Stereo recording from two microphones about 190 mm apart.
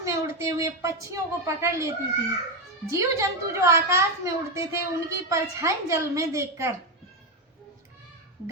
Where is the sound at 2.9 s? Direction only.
15° right (ahead or behind).